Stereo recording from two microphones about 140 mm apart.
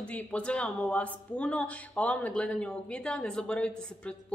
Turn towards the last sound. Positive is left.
turn(degrees=10)  # may be behind; listen again after turning